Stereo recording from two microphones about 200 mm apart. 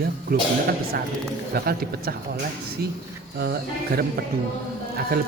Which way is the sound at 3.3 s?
50° right (ahead or behind).